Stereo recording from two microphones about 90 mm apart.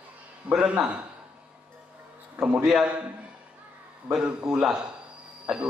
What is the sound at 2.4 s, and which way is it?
Speech, 10° right (ahead or behind).